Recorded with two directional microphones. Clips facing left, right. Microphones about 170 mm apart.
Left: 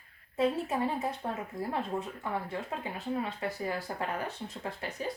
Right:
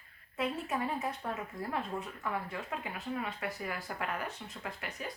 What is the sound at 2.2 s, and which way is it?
Speech, 30° left (ahead or behind).